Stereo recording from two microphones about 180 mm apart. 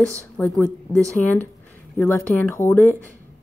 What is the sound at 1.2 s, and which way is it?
A woman's voice, 10° left (ahead or behind).